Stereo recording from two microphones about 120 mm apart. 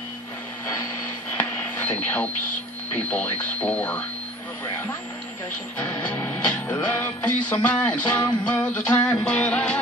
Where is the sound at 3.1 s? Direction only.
15° left (ahead or behind).